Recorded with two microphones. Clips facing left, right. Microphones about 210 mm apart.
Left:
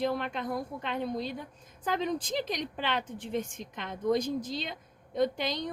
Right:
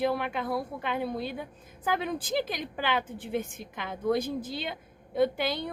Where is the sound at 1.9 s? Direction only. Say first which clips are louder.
Right 1 dB; 5° right (ahead or behind).